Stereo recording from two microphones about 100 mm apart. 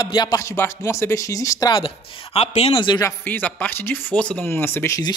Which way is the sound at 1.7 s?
75° left (ahead or behind).